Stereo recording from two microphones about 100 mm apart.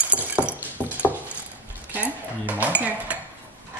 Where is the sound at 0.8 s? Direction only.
15° left (ahead or behind).